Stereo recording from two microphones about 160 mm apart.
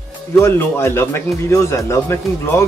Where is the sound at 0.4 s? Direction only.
15° left (ahead or behind).